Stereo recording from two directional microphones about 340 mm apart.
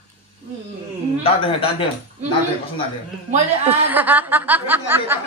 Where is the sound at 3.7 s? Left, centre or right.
Centre.